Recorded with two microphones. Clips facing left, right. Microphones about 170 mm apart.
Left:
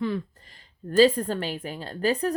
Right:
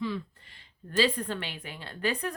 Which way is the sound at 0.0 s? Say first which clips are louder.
Left 5 dB; 45° left (ahead or behind).